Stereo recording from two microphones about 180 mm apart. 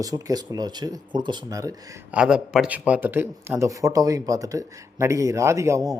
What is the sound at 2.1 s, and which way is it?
A man's voice, 5° right (ahead or behind).